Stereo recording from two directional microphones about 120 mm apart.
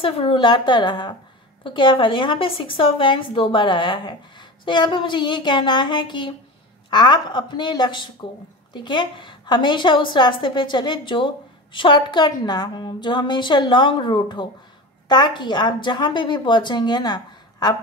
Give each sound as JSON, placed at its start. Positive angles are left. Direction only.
{"t": 0.0, "sound": "a woman's voice", "side_deg": 50}